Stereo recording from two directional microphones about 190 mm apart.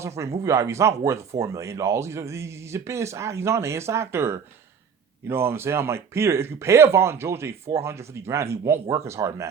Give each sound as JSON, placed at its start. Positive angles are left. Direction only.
{"t": 0.0, "sound": "speech", "side_deg": -15}